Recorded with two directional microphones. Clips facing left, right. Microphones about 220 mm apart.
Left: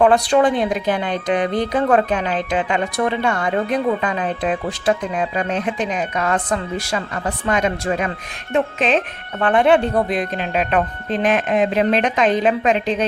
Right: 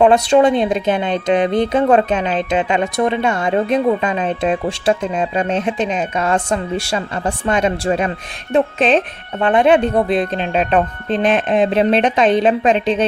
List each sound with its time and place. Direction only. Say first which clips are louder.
0.0 s a woman's voice: right 3 dB; 25° right (ahead or behind)
9.4 s a woman's voice: right 2 dB; 20° right (ahead or behind)